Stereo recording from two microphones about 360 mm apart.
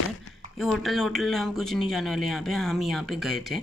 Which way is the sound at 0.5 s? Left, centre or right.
Centre.